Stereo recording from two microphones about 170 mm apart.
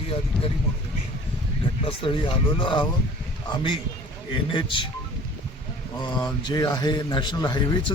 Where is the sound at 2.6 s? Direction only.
30° left (ahead or behind).